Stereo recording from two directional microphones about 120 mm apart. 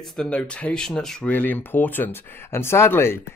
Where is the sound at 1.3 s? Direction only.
15° left (ahead or behind).